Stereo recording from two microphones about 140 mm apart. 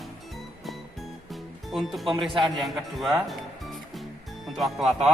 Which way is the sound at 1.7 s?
Centre (ahead or behind).